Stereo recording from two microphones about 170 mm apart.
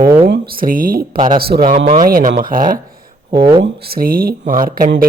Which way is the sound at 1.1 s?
25° right (ahead or behind).